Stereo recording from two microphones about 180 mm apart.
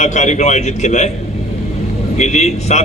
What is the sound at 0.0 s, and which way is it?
A man's voice, 40° left (ahead or behind).